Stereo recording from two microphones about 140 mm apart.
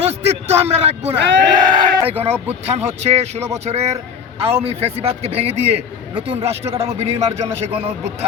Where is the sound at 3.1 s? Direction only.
50° right (ahead or behind).